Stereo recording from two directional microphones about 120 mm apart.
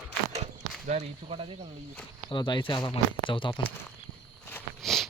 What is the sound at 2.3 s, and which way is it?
Speech, 40° left (ahead or behind).